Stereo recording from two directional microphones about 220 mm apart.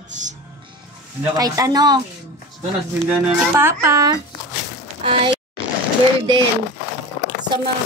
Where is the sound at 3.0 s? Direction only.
10° right (ahead or behind).